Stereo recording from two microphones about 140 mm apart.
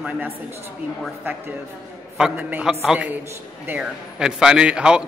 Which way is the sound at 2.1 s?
10° right (ahead or behind).